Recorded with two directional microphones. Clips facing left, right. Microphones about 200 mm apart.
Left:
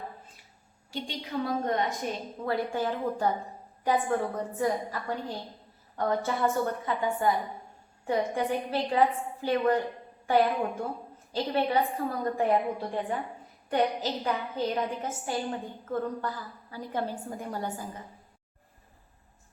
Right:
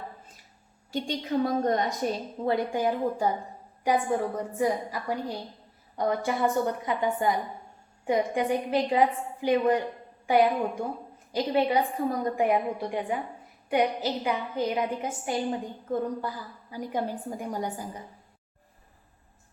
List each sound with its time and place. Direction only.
0.9 s a woman's voice: 45° right (ahead or behind)
2.4 s a woman's voice: 20° right (ahead or behind)